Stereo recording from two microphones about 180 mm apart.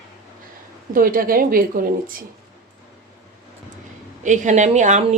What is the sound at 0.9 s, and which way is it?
A woman's voice, 50° right (ahead or behind).